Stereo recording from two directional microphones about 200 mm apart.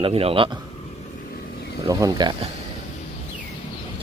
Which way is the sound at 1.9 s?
15° right (ahead or behind).